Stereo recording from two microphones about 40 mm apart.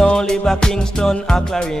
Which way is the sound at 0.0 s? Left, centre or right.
Centre.